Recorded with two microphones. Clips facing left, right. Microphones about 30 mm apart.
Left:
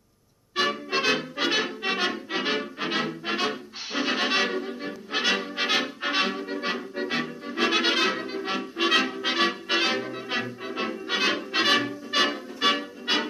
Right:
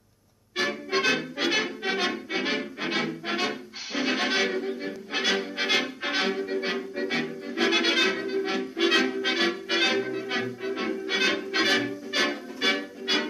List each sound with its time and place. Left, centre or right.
0.6 s music: left
9.9 s music: left
10.8 s music: left